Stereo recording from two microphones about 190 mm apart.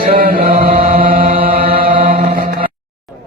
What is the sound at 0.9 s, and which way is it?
Chant, 50° right (ahead or behind).